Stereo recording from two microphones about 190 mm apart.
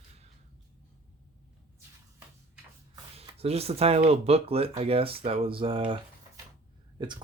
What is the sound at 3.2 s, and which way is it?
Speech, 30° right (ahead or behind).